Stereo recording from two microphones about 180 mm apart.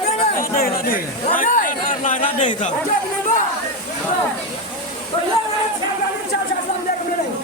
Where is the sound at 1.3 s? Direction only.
45° left (ahead or behind).